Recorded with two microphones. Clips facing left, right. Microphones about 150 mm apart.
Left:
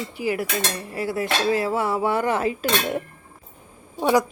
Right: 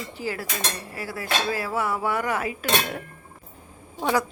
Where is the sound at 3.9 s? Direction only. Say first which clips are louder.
Left 5 dB; 15° left (ahead or behind).